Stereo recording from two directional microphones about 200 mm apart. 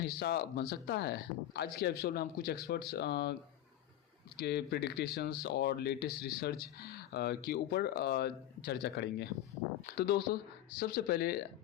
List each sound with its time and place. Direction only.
0.0 s speech: 50° left (ahead or behind)
4.4 s speech: 55° left (ahead or behind)